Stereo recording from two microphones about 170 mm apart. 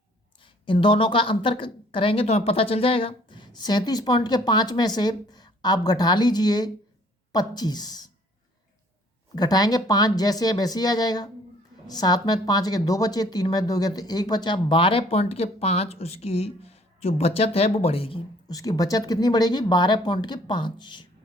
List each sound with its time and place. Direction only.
0.3 s speech: 30° left (ahead or behind)
9.3 s speech: 25° left (ahead or behind)